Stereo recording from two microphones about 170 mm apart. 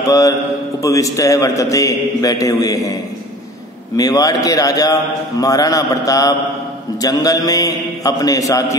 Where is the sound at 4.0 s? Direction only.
20° left (ahead or behind).